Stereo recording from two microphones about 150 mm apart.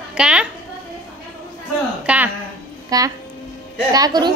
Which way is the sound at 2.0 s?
10° right (ahead or behind).